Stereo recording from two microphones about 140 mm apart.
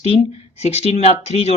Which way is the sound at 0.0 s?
45° left (ahead or behind).